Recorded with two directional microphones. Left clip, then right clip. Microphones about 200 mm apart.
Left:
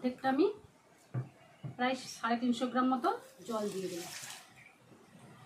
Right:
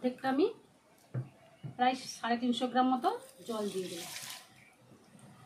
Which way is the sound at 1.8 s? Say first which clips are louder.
Right 3 dB; 5° right (ahead or behind).